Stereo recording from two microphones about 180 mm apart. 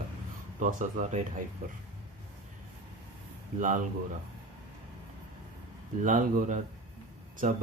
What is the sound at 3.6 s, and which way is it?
Speech, 45° right (ahead or behind).